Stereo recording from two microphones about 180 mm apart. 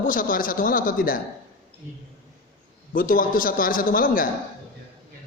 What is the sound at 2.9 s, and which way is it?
Speech, 50° left (ahead or behind).